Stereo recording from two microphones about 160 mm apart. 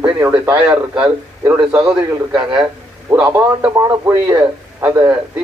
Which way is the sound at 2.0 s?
30° right (ahead or behind).